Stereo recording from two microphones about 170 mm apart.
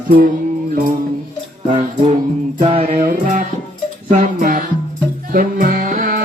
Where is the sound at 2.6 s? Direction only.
40° right (ahead or behind).